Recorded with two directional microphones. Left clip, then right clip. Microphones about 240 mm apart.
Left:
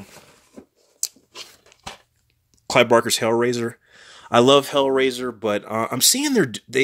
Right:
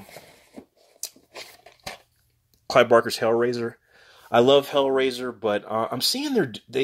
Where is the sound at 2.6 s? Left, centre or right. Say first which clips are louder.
Left 1 dB; left.